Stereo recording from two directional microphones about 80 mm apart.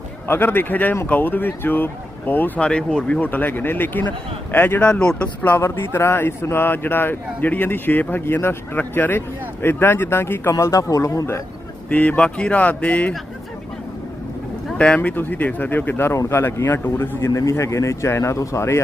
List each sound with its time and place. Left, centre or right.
0.3 s speech: left
2.6 s speech: centre
3.2 s speech: left
5.4 s speech: left
10.6 s speech: left
11.9 s speech: centre
14.8 s speech: centre
17.2 s speech: left